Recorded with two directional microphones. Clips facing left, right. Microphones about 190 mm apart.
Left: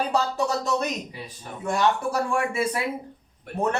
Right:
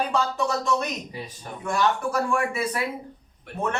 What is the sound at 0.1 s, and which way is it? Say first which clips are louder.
Speech: left 1 dB; 40° left (ahead or behind).